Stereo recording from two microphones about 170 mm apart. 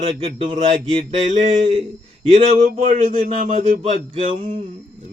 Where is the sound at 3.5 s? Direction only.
50° right (ahead or behind).